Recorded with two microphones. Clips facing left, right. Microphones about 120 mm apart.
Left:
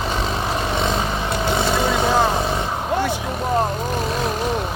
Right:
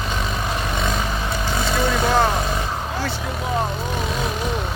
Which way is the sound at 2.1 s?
10° left (ahead or behind).